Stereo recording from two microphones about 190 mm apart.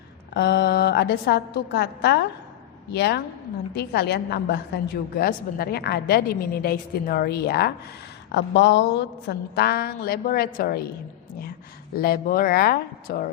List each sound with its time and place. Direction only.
0.3 s a woman's voice: 55° left (ahead or behind)
11.9 s speech: 50° left (ahead or behind)